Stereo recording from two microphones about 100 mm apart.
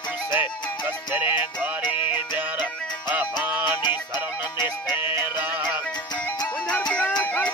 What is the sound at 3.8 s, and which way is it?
Music, 45° left (ahead or behind).